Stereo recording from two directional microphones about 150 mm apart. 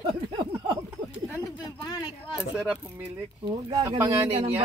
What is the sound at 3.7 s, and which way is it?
Speech, 25° right (ahead or behind).